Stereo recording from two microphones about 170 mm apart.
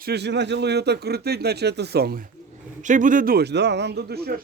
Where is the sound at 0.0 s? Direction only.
80° right; by 2.3 s 60° right (ahead or behind).